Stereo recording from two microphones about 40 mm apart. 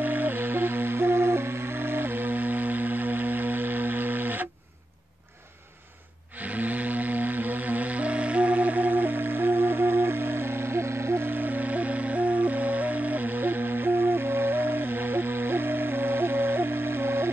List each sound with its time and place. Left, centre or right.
0.0 s music: right
6.3 s music: right
11.1 s music: right